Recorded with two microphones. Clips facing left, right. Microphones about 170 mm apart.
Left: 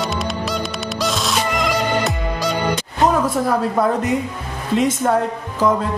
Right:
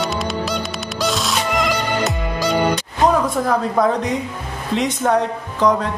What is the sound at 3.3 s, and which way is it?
A man's voice, 5° left (ahead or behind).